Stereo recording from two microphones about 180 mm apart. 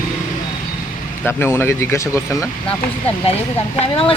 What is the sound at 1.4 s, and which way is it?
Speech, 15° left (ahead or behind).